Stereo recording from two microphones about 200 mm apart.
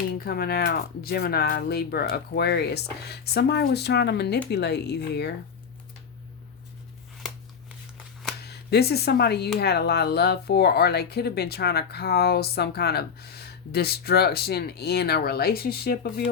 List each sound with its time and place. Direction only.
0.3 s speech: 50° left (ahead or behind)
8.4 s speech: 55° left (ahead or behind)